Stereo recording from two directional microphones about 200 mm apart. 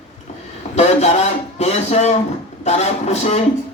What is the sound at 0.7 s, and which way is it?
A man's voice, 35° left (ahead or behind).